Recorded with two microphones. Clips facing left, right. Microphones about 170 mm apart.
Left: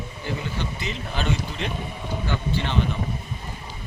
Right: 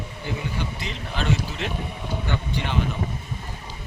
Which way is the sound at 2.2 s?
15° right (ahead or behind).